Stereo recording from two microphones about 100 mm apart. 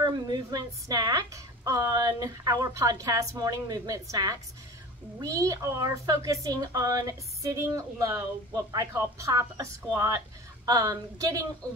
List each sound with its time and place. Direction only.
0.0 s a woman's voice: 40° right (ahead or behind)